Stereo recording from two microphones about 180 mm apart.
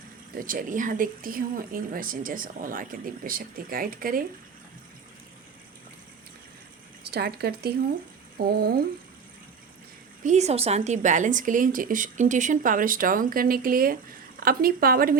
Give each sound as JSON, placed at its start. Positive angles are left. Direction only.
{"t": 0.3, "sound": "speech", "side_deg": -50}
{"t": 7.0, "sound": "a woman's voice", "side_deg": -65}
{"t": 10.2, "sound": "a woman's voice", "side_deg": -40}